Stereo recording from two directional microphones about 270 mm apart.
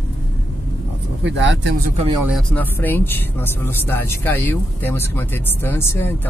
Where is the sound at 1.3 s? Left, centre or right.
Right.